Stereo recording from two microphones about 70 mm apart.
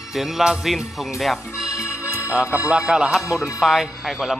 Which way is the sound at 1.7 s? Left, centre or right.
Left.